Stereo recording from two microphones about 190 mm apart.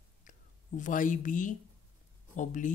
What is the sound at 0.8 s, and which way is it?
Speech, 45° left (ahead or behind).